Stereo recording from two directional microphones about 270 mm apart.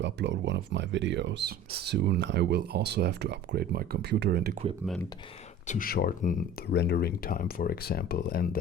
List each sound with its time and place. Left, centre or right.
0.0 s speech: right
5.6 s speech: left